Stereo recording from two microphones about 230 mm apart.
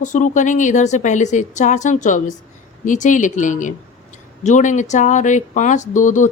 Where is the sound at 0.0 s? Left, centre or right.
Left.